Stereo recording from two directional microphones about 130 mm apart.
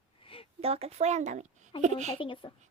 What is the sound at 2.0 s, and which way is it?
Speech, 45° left (ahead or behind).